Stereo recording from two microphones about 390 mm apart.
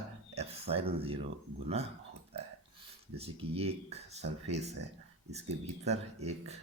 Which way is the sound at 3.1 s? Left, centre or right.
Centre.